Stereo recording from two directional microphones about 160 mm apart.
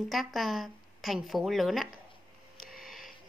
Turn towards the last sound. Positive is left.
turn(degrees=0)  # may be behind; listen again after turning